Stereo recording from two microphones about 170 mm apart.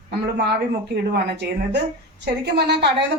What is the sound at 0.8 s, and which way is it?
A woman's voice, 75° right (ahead or behind).